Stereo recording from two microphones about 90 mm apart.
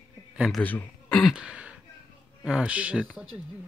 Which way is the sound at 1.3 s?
10° right (ahead or behind).